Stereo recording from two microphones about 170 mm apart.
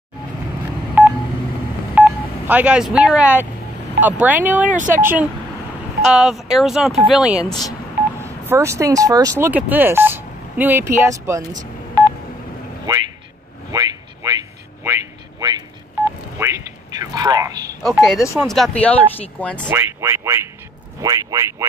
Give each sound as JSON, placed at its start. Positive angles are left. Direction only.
{"t": 1.0, "sound": "telephone dialing", "side_deg": -10}
{"t": 2.0, "sound": "speech", "side_deg": -10}
{"t": 8.2, "sound": "speech", "side_deg": -15}
{"t": 9.5, "sound": "speech", "side_deg": -10}
{"t": 12.0, "sound": "telephone dialing", "side_deg": -25}
{"t": 12.9, "sound": "speech", "side_deg": -25}
{"t": 13.7, "sound": "a sound", "side_deg": -20}
{"t": 17.8, "sound": "speech", "side_deg": 0}
{"t": 19.7, "sound": "speech", "side_deg": -15}